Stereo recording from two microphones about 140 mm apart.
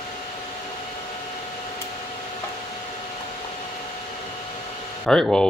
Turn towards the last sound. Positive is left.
turn(degrees=5)  # may be behind; listen again after turning